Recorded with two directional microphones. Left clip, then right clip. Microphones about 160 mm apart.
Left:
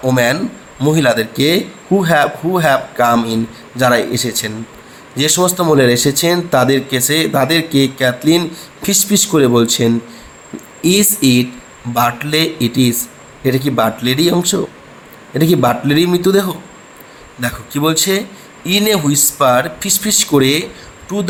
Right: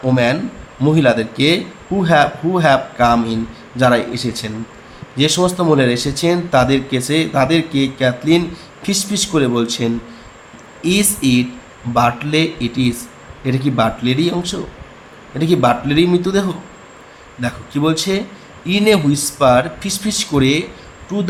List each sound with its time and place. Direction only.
0.0 s speech: 50° left (ahead or behind)
10.8 s speech: 55° left (ahead or behind)